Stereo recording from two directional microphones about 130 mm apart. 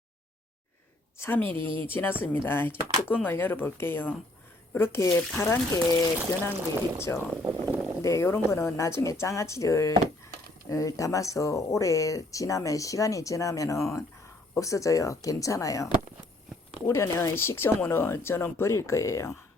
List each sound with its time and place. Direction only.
1.5 s speech: 40° right (ahead or behind)
1.9 s speech: 15° left (ahead or behind)
7.4 s a sound: 20° right (ahead or behind)
8.0 s speech: 20° left (ahead or behind)